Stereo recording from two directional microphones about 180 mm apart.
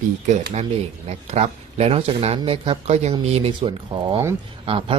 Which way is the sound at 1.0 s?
35° right (ahead or behind).